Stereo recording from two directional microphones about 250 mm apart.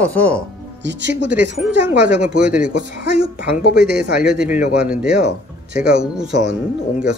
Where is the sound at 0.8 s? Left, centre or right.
Right.